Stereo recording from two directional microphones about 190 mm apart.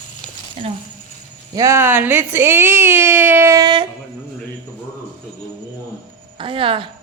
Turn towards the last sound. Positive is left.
turn(degrees=-30)  # may be behind; listen again after turning